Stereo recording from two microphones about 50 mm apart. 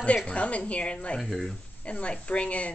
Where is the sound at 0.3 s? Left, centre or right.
Left.